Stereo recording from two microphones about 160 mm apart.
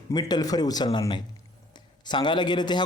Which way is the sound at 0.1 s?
25° left (ahead or behind).